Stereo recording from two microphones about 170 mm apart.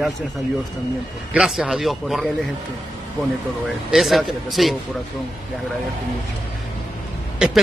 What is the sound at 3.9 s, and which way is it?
Speech, centre (ahead or behind).